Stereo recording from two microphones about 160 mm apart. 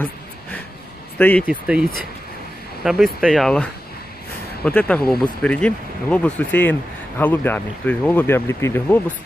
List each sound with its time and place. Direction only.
1.1 s speech: 10° left (ahead or behind)
1.5 s speech: 5° right (ahead or behind)
4.6 s speech: 5° left (ahead or behind)